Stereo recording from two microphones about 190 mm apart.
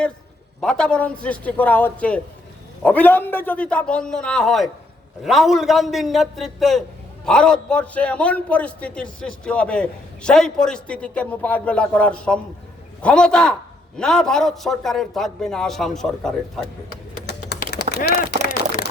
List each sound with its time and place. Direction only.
0.6 s a man's voice: 5° left (ahead or behind)
17.2 s pigeon: 55° left (ahead or behind)
17.9 s speech: 60° left (ahead or behind)